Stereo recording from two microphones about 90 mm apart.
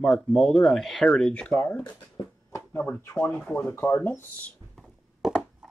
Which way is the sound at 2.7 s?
15° left (ahead or behind).